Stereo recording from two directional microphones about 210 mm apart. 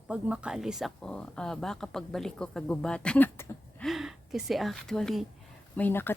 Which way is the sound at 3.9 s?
Centre (ahead or behind).